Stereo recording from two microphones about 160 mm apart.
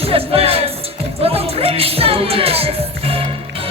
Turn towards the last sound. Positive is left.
turn(degrees=-35)  # may be behind; listen again after turning